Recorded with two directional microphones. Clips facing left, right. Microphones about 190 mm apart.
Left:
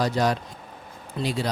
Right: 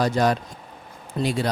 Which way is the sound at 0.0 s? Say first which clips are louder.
Right 2 dB; 55° right (ahead or behind).